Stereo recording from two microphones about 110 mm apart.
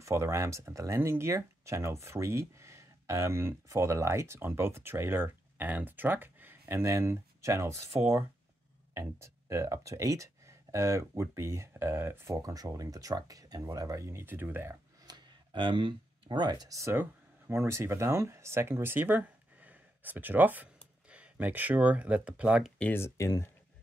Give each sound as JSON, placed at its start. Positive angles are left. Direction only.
{"t": 0.0, "sound": "speech", "side_deg": -25}
{"t": 12.4, "sound": "speech", "side_deg": -35}
{"t": 15.0, "sound": "speech", "side_deg": -45}
{"t": 22.8, "sound": "speech", "side_deg": 20}